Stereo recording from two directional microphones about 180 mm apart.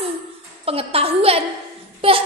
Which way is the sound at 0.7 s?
30° right (ahead or behind).